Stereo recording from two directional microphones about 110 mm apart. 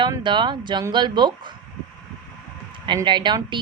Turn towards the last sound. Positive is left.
turn(degrees=-45)  # may be behind; listen again after turning